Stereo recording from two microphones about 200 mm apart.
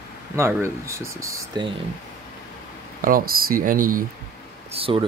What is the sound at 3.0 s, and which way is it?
Speech, 45° right (ahead or behind).